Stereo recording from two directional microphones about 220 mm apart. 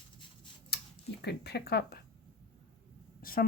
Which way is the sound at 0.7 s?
45° left (ahead or behind).